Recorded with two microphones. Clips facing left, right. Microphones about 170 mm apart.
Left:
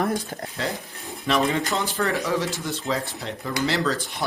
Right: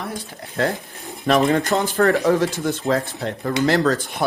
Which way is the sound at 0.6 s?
55° right (ahead or behind).